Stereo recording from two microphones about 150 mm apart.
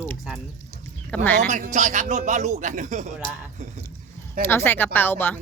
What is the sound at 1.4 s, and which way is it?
Speech, 55° right (ahead or behind).